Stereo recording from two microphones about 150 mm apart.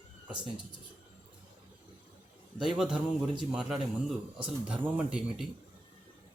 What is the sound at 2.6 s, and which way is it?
A man's voice, 5° right (ahead or behind).